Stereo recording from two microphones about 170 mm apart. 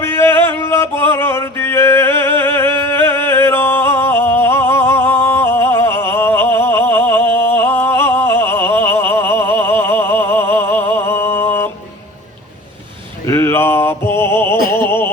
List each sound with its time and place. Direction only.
0.4 s music: 15° left (ahead or behind)
13.2 s a sound: 15° left (ahead or behind)
14.7 s opera: 15° left (ahead or behind)